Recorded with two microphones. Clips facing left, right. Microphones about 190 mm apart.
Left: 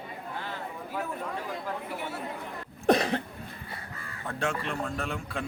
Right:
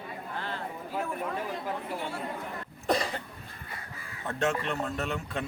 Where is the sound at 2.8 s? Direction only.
65° left (ahead or behind).